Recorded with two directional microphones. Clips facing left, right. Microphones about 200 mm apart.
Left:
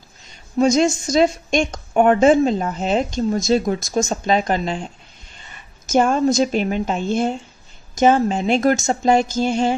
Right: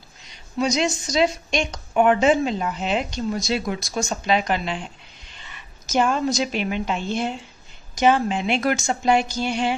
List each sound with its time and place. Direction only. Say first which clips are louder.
0.6 s a woman's voice: left 6 dB; 45° left (ahead or behind)
5.4 s a sound: even; 45° left (ahead or behind)
6.3 s a woman's voice: left 6 dB; 40° left (ahead or behind)